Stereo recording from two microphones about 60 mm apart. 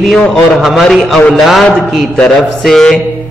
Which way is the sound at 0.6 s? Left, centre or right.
Centre.